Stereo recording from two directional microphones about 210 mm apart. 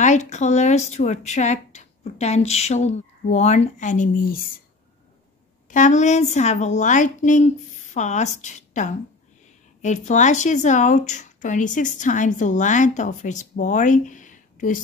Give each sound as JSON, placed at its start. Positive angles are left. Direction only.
{"t": 0.0, "sound": "speech", "side_deg": 35}
{"t": 5.7, "sound": "speech", "side_deg": 35}